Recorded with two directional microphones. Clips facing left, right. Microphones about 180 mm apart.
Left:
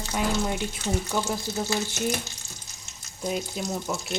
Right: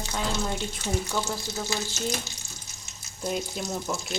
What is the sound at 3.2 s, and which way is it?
Speech, centre (ahead or behind).